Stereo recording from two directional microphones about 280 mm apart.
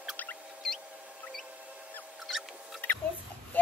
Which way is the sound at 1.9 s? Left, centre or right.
Centre.